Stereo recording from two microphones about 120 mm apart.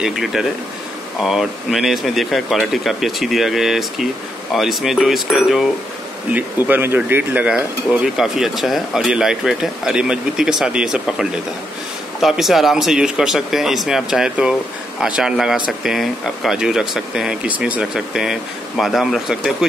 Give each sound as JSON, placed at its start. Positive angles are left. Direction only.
{"t": 0.0, "sound": "speech", "side_deg": 0}
{"t": 6.3, "sound": "speech", "side_deg": -15}